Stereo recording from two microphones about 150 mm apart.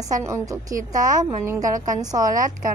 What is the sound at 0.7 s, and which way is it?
Speech, 60° right (ahead or behind).